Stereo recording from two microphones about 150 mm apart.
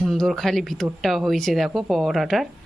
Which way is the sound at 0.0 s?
Centre (ahead or behind).